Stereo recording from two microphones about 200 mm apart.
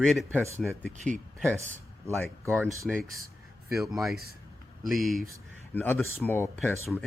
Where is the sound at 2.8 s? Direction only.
Centre (ahead or behind).